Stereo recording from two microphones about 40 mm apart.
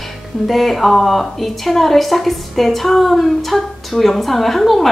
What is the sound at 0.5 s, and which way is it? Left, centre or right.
Speech, centre.